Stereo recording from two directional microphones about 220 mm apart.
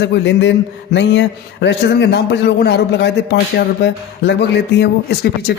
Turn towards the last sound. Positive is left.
turn(degrees=50)  # may be behind; listen again after turning